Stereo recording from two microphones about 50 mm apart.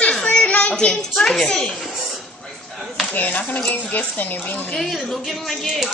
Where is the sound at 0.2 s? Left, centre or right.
Left.